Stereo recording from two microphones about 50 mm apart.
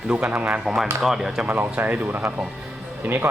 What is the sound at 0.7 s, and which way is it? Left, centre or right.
Speech, centre.